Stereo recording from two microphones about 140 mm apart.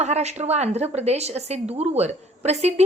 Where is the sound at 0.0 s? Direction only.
50° right (ahead or behind).